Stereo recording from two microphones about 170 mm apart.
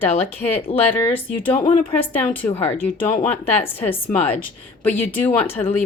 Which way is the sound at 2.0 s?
10° left (ahead or behind).